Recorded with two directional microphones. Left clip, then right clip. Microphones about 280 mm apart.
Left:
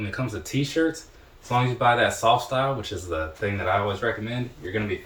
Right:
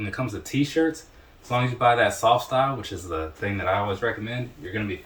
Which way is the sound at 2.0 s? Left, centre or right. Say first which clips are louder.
Even; centre.